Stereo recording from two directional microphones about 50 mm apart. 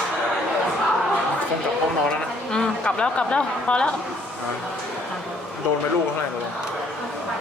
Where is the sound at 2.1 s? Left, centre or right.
Centre.